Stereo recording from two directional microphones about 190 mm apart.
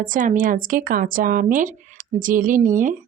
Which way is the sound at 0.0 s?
45° right (ahead or behind).